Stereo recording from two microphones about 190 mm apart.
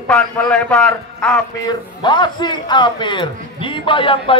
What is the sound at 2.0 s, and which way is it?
A man's voice, 25° left (ahead or behind).